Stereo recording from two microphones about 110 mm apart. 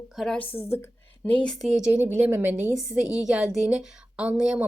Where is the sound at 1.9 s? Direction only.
15° right (ahead or behind).